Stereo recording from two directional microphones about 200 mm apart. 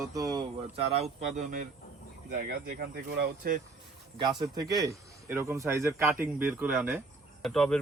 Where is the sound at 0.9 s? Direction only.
35° right (ahead or behind).